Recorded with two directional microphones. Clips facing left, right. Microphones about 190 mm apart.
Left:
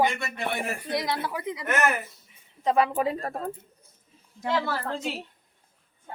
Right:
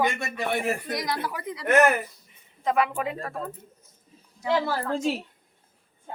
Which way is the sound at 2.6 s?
30° left (ahead or behind).